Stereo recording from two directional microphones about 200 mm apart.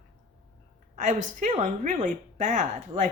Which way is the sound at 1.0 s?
40° right (ahead or behind).